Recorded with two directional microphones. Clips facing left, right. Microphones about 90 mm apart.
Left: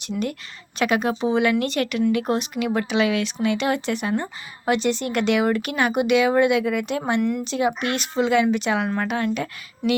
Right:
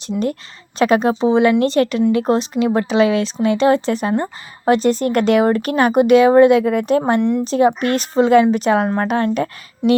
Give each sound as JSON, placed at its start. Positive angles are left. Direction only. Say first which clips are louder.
{"t": 0.0, "sound": "speech", "louder": "right 6 dB", "side_deg": -35}
{"t": 7.2, "sound": "speech", "louder": "right 6 dB", "side_deg": -25}
{"t": 7.4, "sound": "speech", "louder": "right 8 dB", "side_deg": -40}